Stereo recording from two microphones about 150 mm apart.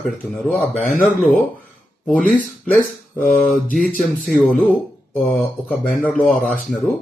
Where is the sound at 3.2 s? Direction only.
55° left (ahead or behind).